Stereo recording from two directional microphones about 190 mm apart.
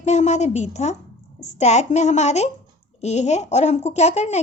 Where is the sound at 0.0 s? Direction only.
35° left (ahead or behind).